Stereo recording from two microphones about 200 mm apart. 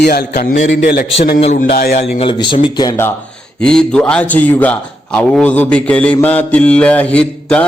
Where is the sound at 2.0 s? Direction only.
30° left (ahead or behind).